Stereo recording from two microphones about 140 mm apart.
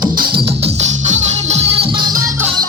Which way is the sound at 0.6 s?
55° right (ahead or behind).